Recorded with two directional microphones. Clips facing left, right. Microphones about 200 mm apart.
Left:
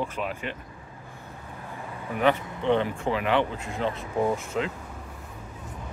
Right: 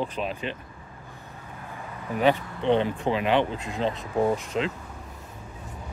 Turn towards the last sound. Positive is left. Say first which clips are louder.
# right 2 dB
turn(degrees=-15)  # may be behind; listen again after turning